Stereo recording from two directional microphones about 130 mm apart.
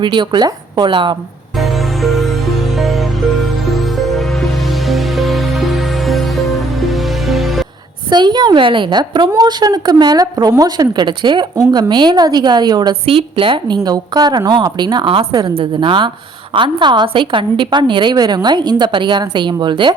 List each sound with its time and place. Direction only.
0.0 s a woman's voice: 35° right (ahead or behind)
1.5 s music: centre (ahead or behind)
8.1 s a woman's voice: 35° right (ahead or behind)
13.1 s a woman's voice: 45° right (ahead or behind)
13.8 s a woman's voice: 30° right (ahead or behind)
15.3 s a woman's voice: 30° right (ahead or behind)